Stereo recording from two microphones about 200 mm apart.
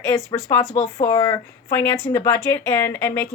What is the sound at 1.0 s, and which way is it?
Speech, 20° left (ahead or behind).